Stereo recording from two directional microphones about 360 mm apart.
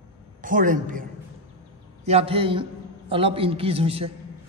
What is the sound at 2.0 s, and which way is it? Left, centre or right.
A man's voice, centre.